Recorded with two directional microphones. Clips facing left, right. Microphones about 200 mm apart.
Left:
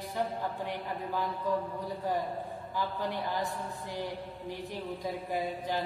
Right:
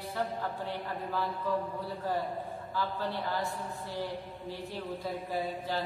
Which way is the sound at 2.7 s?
15° left (ahead or behind).